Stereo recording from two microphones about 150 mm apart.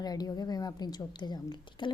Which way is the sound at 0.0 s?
25° left (ahead or behind).